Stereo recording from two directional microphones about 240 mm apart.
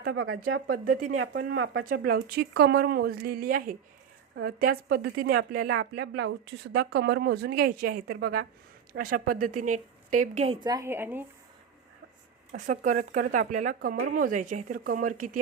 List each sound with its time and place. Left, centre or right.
0.0 s speech: right
1.1 s speech: right
1.8 s speech: right; by 11.3 s centre
12.5 s speech: right